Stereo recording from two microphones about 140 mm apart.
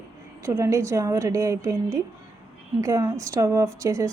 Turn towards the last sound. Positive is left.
turn(degrees=-25)  # may be behind; listen again after turning